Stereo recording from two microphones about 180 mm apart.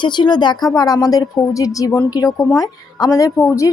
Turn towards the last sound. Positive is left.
turn(degrees=15)  # may be behind; listen again after turning